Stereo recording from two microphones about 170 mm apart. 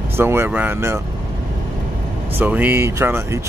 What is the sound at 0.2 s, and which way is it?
Speech, 15° right (ahead or behind).